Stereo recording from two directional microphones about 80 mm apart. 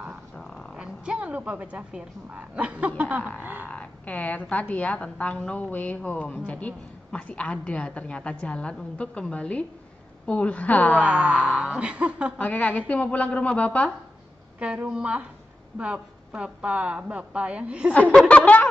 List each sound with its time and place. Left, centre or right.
0.7 s a woman's voice: centre
3.6 s a woman's voice: centre
11.0 s a woman's voice: centre
12.4 s a woman's voice: centre
14.6 s a woman's voice: centre
18.3 s a sound: centre